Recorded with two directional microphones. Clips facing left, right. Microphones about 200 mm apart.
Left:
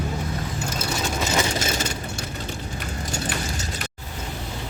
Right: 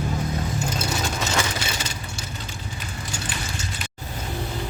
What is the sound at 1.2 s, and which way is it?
Vehicle, 15° left (ahead or behind).